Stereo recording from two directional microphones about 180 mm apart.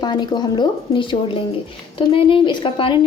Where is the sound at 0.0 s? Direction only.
25° left (ahead or behind).